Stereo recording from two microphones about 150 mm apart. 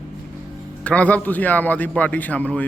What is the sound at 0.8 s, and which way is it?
A man's voice, 10° left (ahead or behind).